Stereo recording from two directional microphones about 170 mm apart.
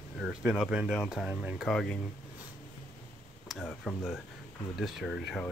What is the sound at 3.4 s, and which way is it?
Speech, centre (ahead or behind).